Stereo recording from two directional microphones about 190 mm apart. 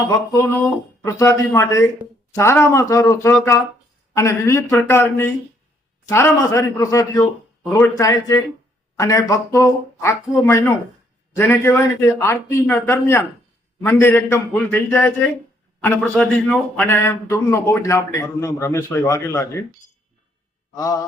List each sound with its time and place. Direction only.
0.1 s speech: 15° left (ahead or behind)
20.7 s speech: 20° left (ahead or behind)